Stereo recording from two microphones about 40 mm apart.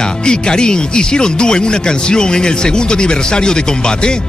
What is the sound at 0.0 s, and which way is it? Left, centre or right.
Speech, left.